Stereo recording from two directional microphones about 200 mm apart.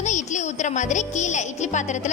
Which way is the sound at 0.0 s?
35° left (ahead or behind).